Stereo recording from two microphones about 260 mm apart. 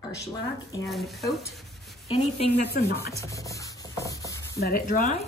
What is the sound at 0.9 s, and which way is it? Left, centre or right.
Speech, centre.